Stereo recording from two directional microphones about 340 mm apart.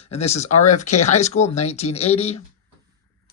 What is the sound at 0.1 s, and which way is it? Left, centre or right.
Speech, centre.